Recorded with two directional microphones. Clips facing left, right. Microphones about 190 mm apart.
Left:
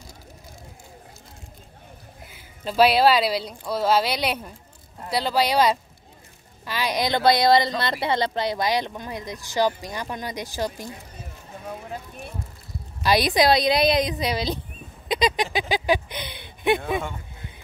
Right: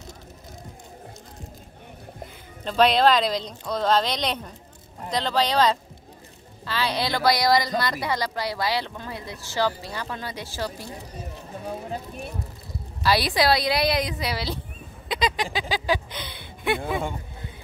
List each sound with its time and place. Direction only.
2.6 s speech: 10° left (ahead or behind)
13.0 s speech: 20° left (ahead or behind)